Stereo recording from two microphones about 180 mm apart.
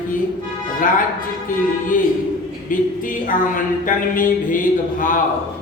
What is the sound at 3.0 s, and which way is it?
A man's voice, 50° left (ahead or behind).